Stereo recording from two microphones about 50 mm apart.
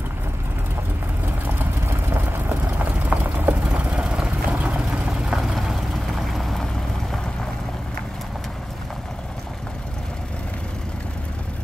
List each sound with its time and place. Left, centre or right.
2.8 s vehicle: right
3.7 s vehicle: right
5.4 s vehicle: centre